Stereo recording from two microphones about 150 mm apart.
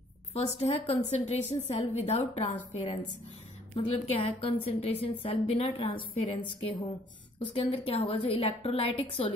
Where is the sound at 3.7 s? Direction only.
40° left (ahead or behind).